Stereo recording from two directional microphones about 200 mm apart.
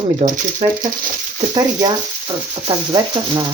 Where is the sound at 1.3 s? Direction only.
20° right (ahead or behind).